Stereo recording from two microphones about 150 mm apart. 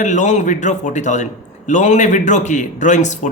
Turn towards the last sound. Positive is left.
turn(degrees=55)  # may be behind; listen again after turning